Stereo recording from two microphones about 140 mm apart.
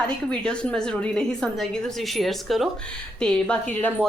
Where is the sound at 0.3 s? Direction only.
5° left (ahead or behind).